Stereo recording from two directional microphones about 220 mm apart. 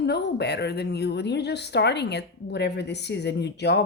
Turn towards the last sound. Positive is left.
turn(degrees=50)  # may be behind; listen again after turning